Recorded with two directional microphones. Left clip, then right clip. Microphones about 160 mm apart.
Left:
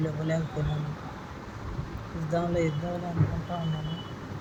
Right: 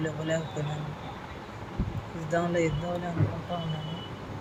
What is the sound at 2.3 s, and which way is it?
Speech, 15° left (ahead or behind).